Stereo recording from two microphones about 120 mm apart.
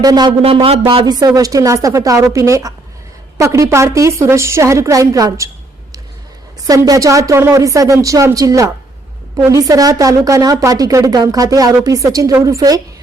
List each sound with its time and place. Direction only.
0.0 s speech: 35° right (ahead or behind)
0.4 s speech: 50° right (ahead or behind)
1.0 s speech: 30° right (ahead or behind)
6.7 s speech: 30° right (ahead or behind)